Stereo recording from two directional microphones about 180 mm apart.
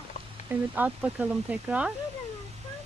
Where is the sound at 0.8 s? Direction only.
10° right (ahead or behind).